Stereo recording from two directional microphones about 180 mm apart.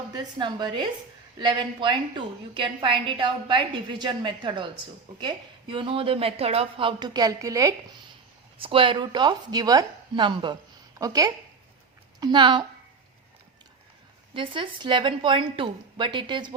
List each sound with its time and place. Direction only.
0.1 s a woman's voice: 25° right (ahead or behind)
14.3 s a woman's voice: 30° right (ahead or behind)